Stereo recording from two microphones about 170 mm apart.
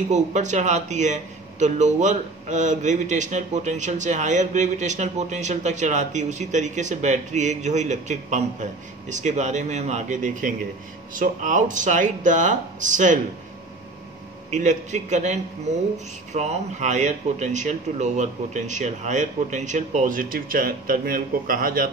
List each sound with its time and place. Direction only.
0.1 s a man's voice: 45° right (ahead or behind)
14.5 s a man's voice: 45° right (ahead or behind)